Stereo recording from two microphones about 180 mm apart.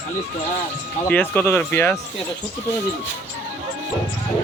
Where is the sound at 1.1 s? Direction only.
10° left (ahead or behind).